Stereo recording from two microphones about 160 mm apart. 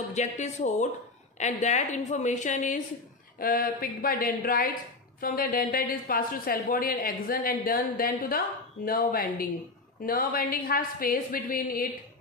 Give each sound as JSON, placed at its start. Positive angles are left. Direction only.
{"t": 0.1, "sound": "a woman's voice", "side_deg": 45}
{"t": 3.3, "sound": "a woman's voice", "side_deg": 65}